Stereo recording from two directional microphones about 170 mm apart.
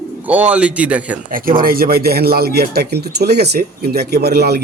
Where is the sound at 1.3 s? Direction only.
55° right (ahead or behind).